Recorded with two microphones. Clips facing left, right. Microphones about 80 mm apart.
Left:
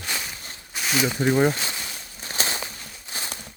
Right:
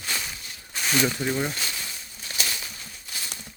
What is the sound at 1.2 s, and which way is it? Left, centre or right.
Speech, left.